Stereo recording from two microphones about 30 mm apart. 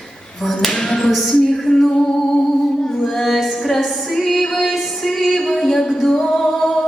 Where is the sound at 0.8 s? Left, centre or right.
Centre.